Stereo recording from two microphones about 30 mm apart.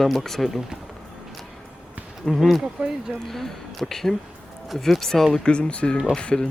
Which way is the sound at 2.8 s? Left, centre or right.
Right.